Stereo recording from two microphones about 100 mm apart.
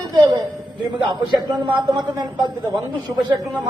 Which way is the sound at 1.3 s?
50° right (ahead or behind).